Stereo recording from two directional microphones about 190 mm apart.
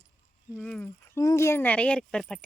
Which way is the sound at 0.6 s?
5° left (ahead or behind).